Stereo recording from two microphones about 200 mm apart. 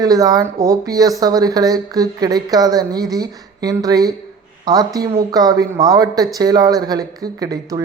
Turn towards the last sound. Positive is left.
turn(degrees=-20)  # may be behind; listen again after turning